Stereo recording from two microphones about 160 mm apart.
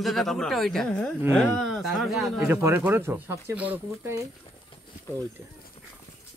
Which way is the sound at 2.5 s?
15° right (ahead or behind).